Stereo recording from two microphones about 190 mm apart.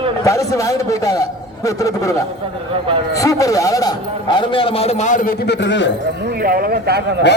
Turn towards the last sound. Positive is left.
turn(degrees=-60)  # may be behind; listen again after turning